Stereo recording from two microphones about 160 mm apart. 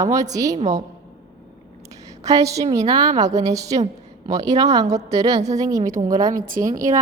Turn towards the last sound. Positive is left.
turn(degrees=-20)  # may be behind; listen again after turning